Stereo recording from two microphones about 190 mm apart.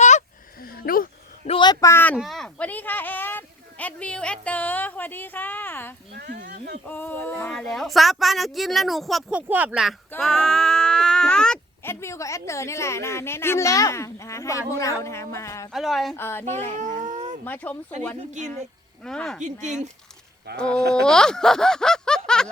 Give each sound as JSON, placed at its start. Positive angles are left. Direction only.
{"t": 0.0, "sound": "a sound", "side_deg": 40}
{"t": 1.5, "sound": "a sound", "side_deg": 25}
{"t": 2.1, "sound": "speech", "side_deg": 0}
{"t": 6.1, "sound": "a sound", "side_deg": -60}
{"t": 6.8, "sound": "speech", "side_deg": 10}
{"t": 15.7, "sound": "speech", "side_deg": 0}
{"t": 16.1, "sound": "speech", "side_deg": 10}
{"t": 16.7, "sound": "a sound", "side_deg": -40}
{"t": 17.4, "sound": "speech", "side_deg": 10}
{"t": 19.0, "sound": "speech", "side_deg": 5}
{"t": 19.4, "sound": "speech", "side_deg": -40}
{"t": 20.6, "sound": "speech", "side_deg": 5}